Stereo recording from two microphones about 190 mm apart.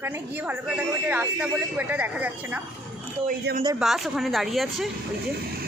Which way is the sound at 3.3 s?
45° right (ahead or behind).